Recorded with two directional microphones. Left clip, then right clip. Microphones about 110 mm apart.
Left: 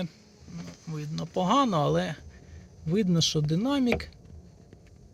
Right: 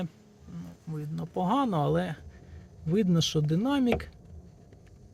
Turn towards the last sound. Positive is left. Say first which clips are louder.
# even
turn(degrees=5)  # may be behind; listen again after turning